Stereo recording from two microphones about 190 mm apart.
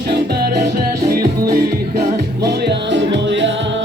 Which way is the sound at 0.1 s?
55° right (ahead or behind).